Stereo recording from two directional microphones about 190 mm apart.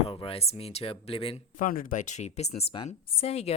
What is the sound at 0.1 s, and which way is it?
Speech, 30° left (ahead or behind).